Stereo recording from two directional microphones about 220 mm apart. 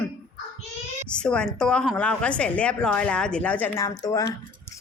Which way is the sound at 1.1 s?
5° left (ahead or behind).